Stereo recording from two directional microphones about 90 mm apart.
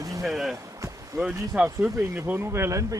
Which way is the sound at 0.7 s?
35° right (ahead or behind).